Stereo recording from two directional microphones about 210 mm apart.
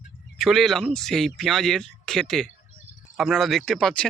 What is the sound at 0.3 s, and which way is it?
Speech, centre (ahead or behind).